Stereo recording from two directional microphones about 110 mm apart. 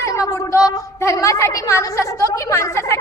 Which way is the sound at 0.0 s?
30° left (ahead or behind).